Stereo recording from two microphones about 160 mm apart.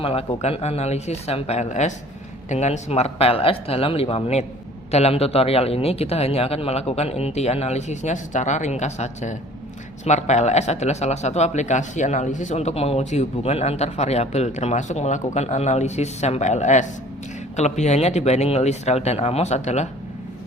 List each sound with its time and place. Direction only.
0.0 s speech: 35° left (ahead or behind)